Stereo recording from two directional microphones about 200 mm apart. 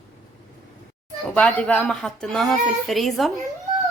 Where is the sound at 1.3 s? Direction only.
5° left (ahead or behind).